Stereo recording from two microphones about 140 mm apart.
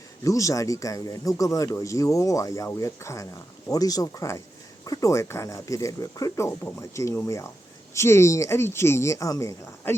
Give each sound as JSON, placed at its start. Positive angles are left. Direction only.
{"t": 0.3, "sound": "speech", "side_deg": 25}